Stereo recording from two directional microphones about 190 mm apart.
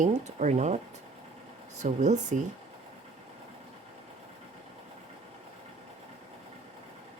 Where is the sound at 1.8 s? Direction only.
40° right (ahead or behind).